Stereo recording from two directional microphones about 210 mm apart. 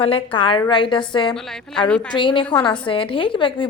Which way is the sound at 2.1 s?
25° left (ahead or behind).